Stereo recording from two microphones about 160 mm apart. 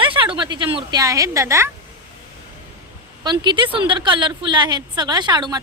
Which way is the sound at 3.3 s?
30° right (ahead or behind).